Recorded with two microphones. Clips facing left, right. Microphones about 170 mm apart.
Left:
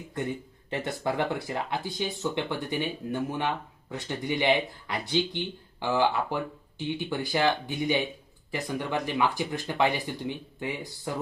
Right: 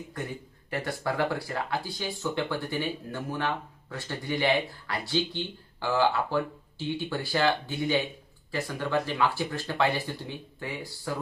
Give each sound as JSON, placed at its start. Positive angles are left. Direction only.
{"t": 0.7, "sound": "speech", "side_deg": 20}